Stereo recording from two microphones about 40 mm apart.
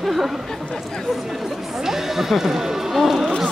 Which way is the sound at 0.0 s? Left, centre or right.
Centre.